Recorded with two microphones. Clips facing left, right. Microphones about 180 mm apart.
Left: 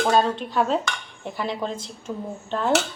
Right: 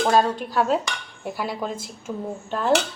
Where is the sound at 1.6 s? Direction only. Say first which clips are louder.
Even; 5° right (ahead or behind).